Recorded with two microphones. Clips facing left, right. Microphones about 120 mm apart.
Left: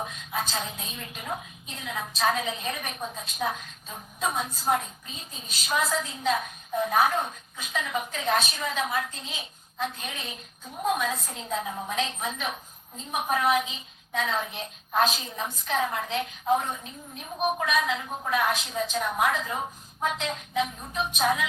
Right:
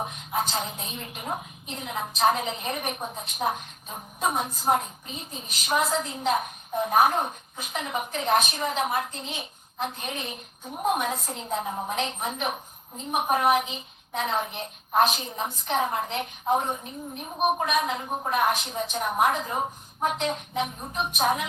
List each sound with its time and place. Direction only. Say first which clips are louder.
0.3 s a woman's voice: right 3 dB; 30° right (ahead or behind)
17.8 s a woman's voice: right 1 dB; 35° right (ahead or behind)
19.3 s speech: right 2 dB; 35° right (ahead or behind)